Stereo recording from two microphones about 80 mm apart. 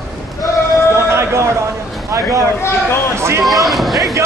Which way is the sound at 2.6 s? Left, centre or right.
Left.